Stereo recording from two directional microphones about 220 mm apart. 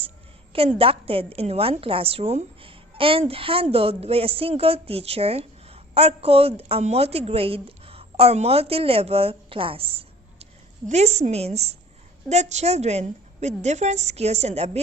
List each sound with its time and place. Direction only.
0.8 s a woman's voice: 25° right (ahead or behind)